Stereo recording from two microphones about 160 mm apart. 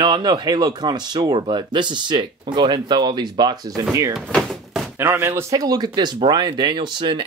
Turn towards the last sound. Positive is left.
turn(degrees=-30)  # may be behind; listen again after turning